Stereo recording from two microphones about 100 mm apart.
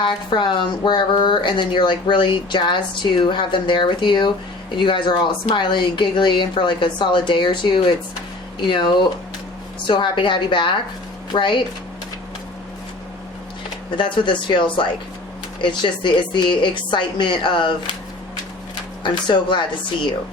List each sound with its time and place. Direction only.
0.0 s speech: 50° left (ahead or behind)
13.9 s speech: 55° left (ahead or behind)
19.0 s speech: 50° left (ahead or behind)